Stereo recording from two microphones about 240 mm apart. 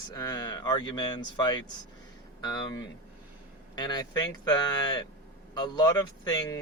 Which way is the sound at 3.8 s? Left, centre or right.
Centre.